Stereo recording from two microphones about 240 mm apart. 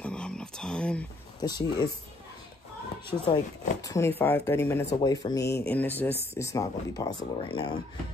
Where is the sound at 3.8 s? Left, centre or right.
Centre.